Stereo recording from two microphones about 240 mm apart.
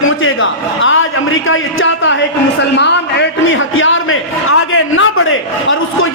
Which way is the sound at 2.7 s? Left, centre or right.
Left.